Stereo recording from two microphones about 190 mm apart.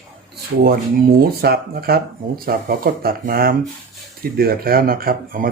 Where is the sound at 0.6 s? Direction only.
55° right (ahead or behind).